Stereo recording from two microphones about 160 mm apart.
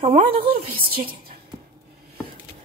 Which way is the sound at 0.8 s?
70° right (ahead or behind).